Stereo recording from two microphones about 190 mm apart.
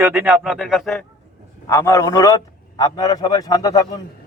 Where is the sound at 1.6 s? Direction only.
15° left (ahead or behind).